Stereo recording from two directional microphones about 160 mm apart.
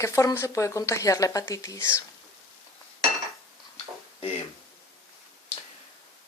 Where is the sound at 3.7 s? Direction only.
40° left (ahead or behind).